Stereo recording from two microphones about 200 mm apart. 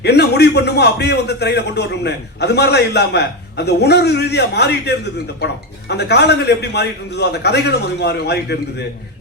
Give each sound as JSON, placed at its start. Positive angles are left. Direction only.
{"t": 0.0, "sound": "speech", "side_deg": 55}